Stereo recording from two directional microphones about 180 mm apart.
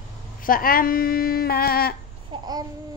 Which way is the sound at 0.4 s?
50° left (ahead or behind).